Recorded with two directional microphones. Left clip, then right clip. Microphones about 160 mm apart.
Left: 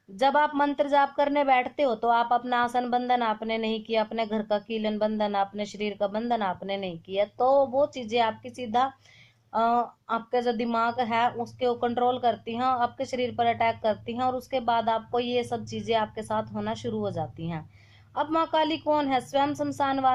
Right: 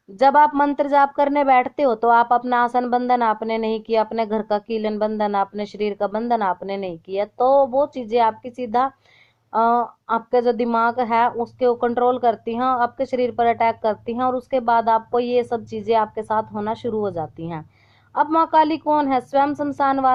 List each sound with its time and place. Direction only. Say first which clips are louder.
0.2 s a woman's voice: right 8 dB; 45° right (ahead or behind)